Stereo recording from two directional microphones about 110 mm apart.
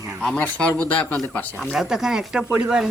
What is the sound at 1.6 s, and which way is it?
Speech, centre (ahead or behind).